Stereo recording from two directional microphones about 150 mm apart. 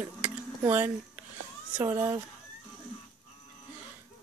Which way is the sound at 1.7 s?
15° right (ahead or behind).